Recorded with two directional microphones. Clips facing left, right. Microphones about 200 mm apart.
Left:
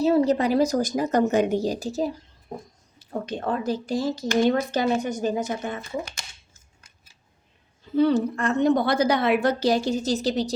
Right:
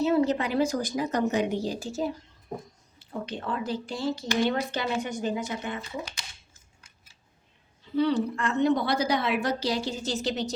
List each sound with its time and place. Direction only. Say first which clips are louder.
0.0 s a woman's voice: left 4 dB; 35° left (ahead or behind)
7.9 s a woman's voice: left 4 dB; 45° left (ahead or behind)